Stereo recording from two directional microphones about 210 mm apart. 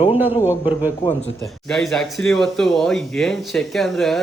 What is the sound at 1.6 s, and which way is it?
Speech, centre (ahead or behind).